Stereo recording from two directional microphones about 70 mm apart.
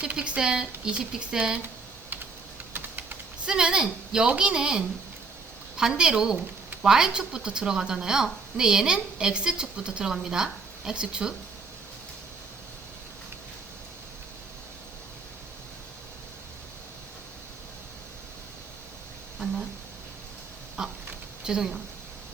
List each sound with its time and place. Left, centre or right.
0.0 s a woman's voice: centre
2.7 s typing: right
3.4 s a woman's voice: centre
20.8 s a sound: centre
21.4 s a woman's voice: centre